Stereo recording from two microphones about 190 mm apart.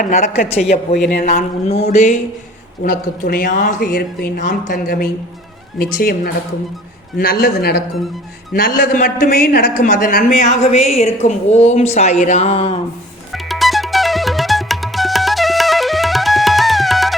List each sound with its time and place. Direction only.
0.0 s a man's voice: 40° left (ahead or behind)
2.8 s a man's voice: 50° left (ahead or behind)
8.5 s a man's voice: 45° left (ahead or behind); by 12.8 s 30° left (ahead or behind)
13.3 s music: centre (ahead or behind)